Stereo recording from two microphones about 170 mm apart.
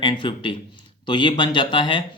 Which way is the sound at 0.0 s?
30° left (ahead or behind).